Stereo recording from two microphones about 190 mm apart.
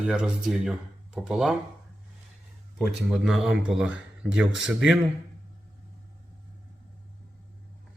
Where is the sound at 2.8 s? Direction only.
5° right (ahead or behind).